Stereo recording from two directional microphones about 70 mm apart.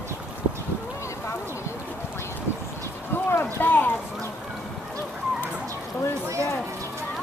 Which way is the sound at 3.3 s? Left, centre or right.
Left.